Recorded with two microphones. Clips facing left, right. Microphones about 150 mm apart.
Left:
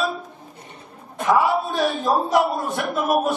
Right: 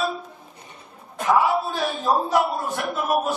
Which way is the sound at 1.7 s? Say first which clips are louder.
Left 2 dB; centre (ahead or behind).